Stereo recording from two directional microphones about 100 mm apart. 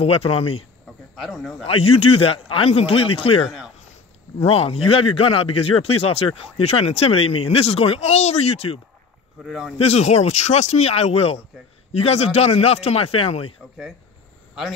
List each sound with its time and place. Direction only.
0.0 s speech: 80° left
1.1 s speech: centre (ahead or behind)
1.7 s a man's voice: 70° left (ahead or behind)
3.4 s a sound: 5° right (ahead or behind)
4.4 s speech: 75° left (ahead or behind)
9.4 s speech: 5° right (ahead or behind)
9.8 s speech: 90° left; by 13.5 s 75° left (ahead or behind)